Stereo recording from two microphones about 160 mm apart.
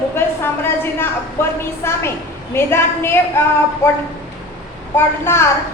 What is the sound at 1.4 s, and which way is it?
A woman's voice, 15° left (ahead or behind).